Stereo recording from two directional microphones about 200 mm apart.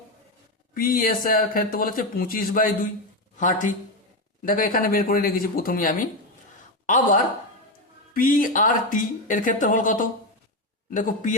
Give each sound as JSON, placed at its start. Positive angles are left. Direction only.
{"t": 0.7, "sound": "speech", "side_deg": 45}